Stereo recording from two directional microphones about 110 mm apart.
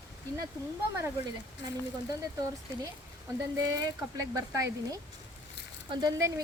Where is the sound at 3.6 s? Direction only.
35° right (ahead or behind).